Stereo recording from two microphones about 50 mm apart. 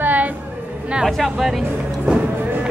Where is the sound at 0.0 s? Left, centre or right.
Right.